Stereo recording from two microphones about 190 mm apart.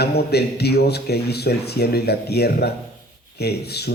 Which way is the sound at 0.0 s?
60° left (ahead or behind).